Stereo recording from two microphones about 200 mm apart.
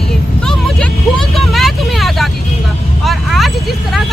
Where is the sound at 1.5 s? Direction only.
Centre (ahead or behind).